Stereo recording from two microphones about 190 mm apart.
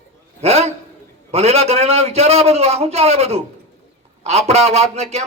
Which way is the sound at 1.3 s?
35° right (ahead or behind).